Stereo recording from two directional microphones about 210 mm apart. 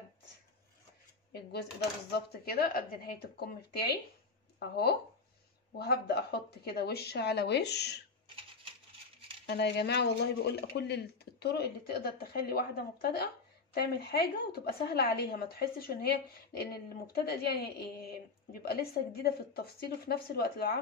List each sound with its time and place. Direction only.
1.3 s a woman's voice: 50° left (ahead or behind)
9.5 s a woman's voice: 55° left (ahead or behind)